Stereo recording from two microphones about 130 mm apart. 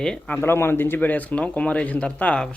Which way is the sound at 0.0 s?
5° left (ahead or behind).